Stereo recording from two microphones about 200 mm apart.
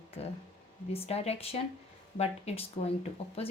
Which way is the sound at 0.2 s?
30° left (ahead or behind).